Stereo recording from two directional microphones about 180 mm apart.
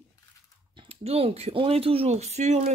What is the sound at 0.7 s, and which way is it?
Speech, 35° right (ahead or behind).